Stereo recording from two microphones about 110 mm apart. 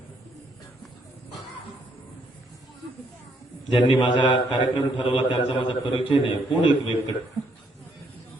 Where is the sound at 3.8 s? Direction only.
45° left (ahead or behind).